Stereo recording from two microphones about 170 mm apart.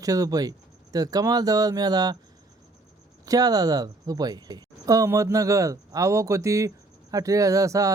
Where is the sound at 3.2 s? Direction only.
20° right (ahead or behind).